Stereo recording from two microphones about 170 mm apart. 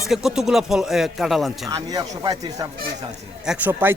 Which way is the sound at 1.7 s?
25° right (ahead or behind).